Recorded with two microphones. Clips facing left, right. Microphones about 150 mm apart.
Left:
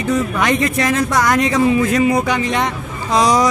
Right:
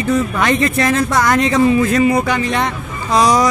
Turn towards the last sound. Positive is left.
turn(degrees=20)  # may be behind; listen again after turning